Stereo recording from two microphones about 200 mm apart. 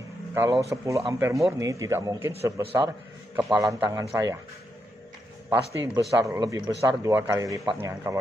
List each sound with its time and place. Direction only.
0.3 s speech: 15° right (ahead or behind)
3.3 s a man's voice: centre (ahead or behind)
3.8 s speech: 15° right (ahead or behind)
5.5 s speech: 15° right (ahead or behind)